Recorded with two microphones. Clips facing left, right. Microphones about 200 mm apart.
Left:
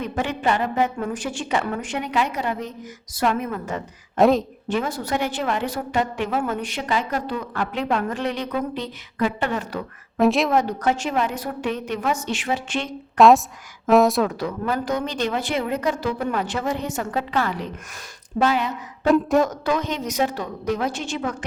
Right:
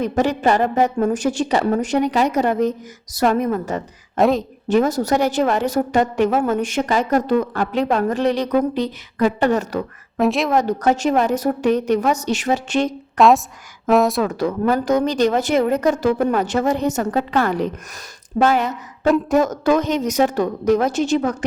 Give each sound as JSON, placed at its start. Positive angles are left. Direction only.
{"t": 0.0, "sound": "a woman's voice", "side_deg": -40}
{"t": 4.2, "sound": "a woman's voice", "side_deg": 0}
{"t": 4.7, "sound": "a woman's voice", "side_deg": -40}
{"t": 10.2, "sound": "a woman's voice", "side_deg": 0}
{"t": 10.6, "sound": "a woman's voice", "side_deg": -40}
{"t": 13.1, "sound": "a woman's voice", "side_deg": 0}
{"t": 14.3, "sound": "a woman's voice", "side_deg": -45}
{"t": 19.1, "sound": "a woman's voice", "side_deg": 0}
{"t": 19.6, "sound": "a woman's voice", "side_deg": -45}